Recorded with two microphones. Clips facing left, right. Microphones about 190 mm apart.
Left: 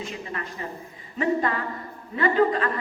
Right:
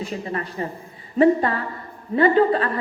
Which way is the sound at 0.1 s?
35° right (ahead or behind).